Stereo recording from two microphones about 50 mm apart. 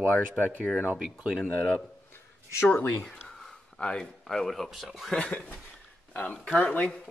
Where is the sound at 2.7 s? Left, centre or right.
Left.